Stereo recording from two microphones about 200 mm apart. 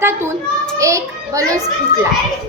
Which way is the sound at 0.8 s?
15° right (ahead or behind).